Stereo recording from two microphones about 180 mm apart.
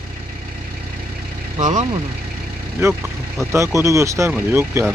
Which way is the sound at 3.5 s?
15° right (ahead or behind).